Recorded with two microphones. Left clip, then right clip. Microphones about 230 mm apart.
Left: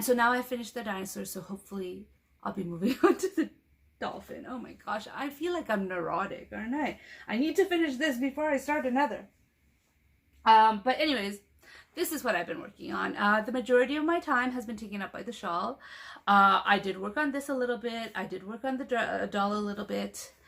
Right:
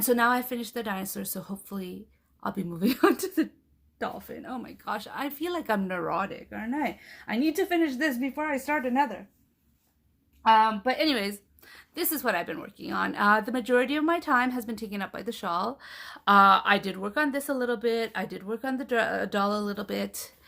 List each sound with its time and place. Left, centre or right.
0.0 s a woman's voice: right
10.4 s a woman's voice: right